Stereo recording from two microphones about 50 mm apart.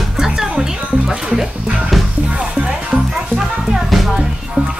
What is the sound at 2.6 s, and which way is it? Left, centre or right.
Music, centre.